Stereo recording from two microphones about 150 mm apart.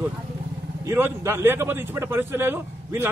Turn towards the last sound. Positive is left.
turn(degrees=-15)  # may be behind; listen again after turning